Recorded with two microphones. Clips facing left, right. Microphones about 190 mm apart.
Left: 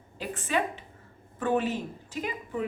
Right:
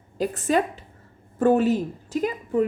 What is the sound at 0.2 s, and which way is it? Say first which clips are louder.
Speech: right 7 dB; 40° right (ahead or behind).